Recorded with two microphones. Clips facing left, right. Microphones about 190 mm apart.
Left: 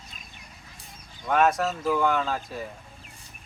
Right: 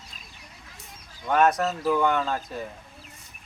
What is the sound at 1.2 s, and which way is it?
Speech, centre (ahead or behind).